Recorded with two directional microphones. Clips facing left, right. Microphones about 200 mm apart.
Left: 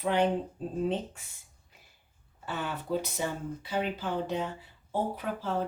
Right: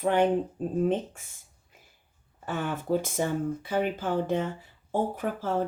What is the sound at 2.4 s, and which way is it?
Speech, 50° right (ahead or behind).